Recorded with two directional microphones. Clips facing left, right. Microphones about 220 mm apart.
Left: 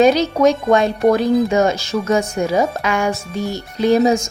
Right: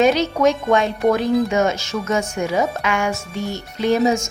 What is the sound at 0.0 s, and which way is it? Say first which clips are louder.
Speech: left 3 dB; 35° left (ahead or behind).